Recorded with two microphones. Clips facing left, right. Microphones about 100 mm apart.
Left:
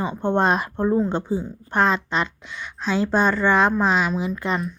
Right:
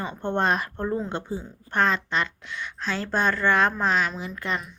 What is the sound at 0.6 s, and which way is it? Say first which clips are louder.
Speech: left 7 dB; 20° left (ahead or behind).